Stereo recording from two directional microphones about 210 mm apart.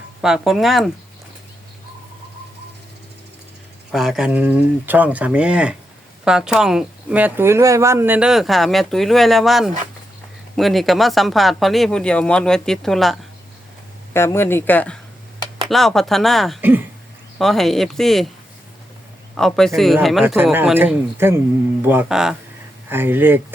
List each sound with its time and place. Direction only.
0.2 s speech: centre (ahead or behind)
3.9 s speech: centre (ahead or behind)
14.1 s speech: 10° left (ahead or behind)
19.4 s speech: centre (ahead or behind)